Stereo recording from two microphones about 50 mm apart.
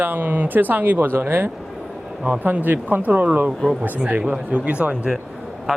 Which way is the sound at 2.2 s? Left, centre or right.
Right.